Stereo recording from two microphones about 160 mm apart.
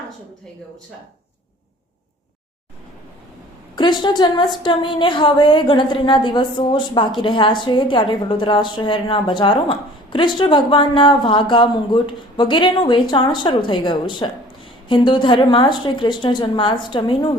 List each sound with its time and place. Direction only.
3.8 s a woman's voice: 30° left (ahead or behind)